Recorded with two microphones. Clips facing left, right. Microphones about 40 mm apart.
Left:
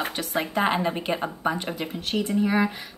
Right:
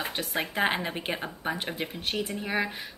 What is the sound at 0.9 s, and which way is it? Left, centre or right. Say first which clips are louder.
Speech: left 5 dB; centre.